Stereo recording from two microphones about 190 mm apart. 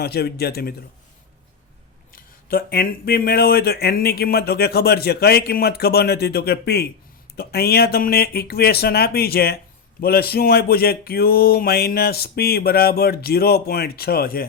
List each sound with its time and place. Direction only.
0.0 s speech: 55° left (ahead or behind)
2.1 s speech: 50° left (ahead or behind)
10.0 s a sound: 55° left (ahead or behind)